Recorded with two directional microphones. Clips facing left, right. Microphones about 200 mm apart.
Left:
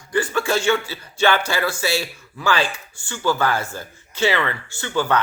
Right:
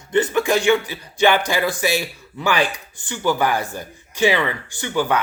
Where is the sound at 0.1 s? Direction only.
20° right (ahead or behind).